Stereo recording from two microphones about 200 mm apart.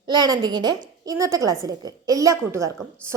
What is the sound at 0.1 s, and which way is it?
A woman's voice, 20° right (ahead or behind).